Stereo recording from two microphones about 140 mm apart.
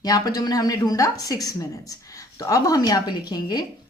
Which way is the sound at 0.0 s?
25° left (ahead or behind).